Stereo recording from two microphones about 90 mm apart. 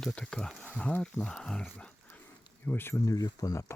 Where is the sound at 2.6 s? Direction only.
25° left (ahead or behind).